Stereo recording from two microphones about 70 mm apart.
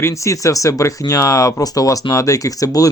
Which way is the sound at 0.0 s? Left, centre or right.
Left.